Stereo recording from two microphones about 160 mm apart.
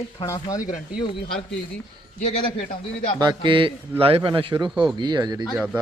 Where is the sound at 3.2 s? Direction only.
30° right (ahead or behind).